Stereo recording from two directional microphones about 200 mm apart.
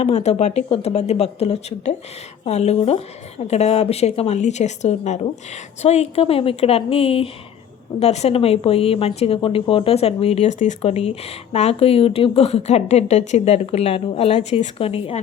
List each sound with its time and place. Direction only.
0.0 s a woman's voice: 30° left (ahead or behind)